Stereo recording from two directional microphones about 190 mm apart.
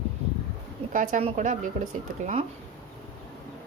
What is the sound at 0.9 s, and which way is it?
A woman's voice, 40° right (ahead or behind).